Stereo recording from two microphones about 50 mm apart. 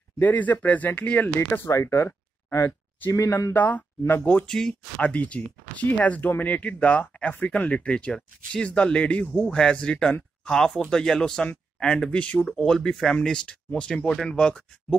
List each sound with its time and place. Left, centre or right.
0.2 s speech: left
1.2 s speech: left
1.7 s speech: left
3.1 s speech: left
3.5 s speech: left
4.5 s speech: centre
4.9 s speech: left
14.0 s speech: centre
14.3 s speech: left